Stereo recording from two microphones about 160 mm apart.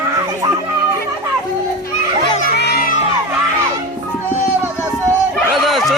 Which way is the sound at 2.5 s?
85° left.